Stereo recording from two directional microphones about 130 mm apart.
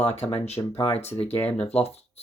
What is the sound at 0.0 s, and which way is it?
Speech, 55° left (ahead or behind).